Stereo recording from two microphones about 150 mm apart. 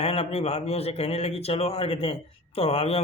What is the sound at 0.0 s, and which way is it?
A man's voice, 40° left (ahead or behind).